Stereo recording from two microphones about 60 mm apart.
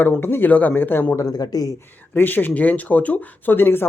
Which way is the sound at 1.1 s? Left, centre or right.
Left.